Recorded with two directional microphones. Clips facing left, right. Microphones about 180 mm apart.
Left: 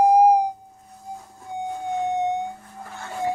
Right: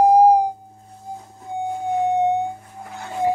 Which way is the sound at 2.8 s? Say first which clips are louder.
Right 5 dB; 15° right (ahead or behind).